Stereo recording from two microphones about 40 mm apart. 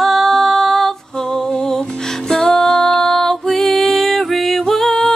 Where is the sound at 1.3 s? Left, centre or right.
Left.